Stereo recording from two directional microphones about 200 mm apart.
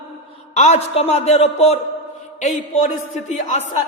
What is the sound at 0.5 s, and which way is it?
Speech, 35° left (ahead or behind).